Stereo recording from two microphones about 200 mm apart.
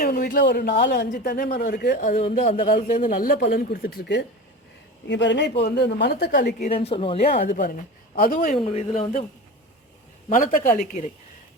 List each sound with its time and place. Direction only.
0.0 s a woman's voice: 45° left (ahead or behind)
6.6 s a woman's voice: 30° left (ahead or behind)
7.3 s speech: 40° left (ahead or behind)
8.5 s speech: 30° left (ahead or behind)
10.2 s speech: 40° left (ahead or behind)